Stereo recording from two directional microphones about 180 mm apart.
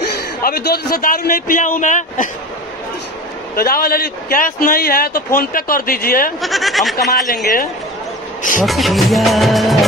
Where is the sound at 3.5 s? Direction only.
55° left (ahead or behind).